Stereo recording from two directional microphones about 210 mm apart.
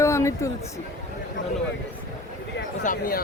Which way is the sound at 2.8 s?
45° left (ahead or behind).